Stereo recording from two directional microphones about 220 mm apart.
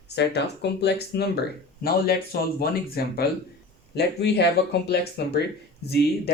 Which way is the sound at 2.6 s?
45° left (ahead or behind).